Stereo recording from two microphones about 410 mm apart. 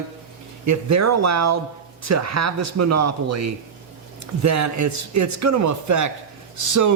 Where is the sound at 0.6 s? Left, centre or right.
Right.